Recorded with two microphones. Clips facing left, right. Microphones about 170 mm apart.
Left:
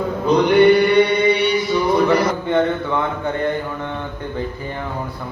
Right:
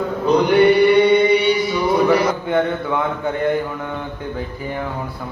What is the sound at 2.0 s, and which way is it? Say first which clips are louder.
Speech: right 1 dB; 5° right (ahead or behind).